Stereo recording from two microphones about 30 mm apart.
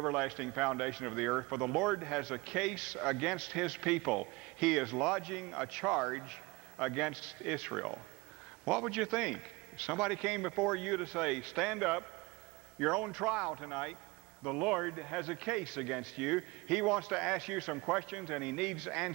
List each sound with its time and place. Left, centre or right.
0.0 s a man's voice: centre